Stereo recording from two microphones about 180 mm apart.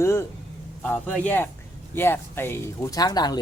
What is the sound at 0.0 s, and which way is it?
A man's voice, 15° left (ahead or behind).